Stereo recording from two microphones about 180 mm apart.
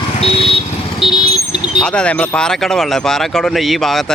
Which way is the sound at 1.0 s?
30° left (ahead or behind).